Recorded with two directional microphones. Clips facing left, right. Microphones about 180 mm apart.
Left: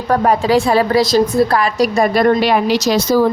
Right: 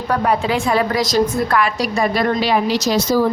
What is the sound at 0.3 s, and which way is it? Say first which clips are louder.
A woman's voice: left 5 dB; 40° left (ahead or behind).